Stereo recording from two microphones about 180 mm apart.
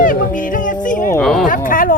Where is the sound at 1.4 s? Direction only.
50° left (ahead or behind).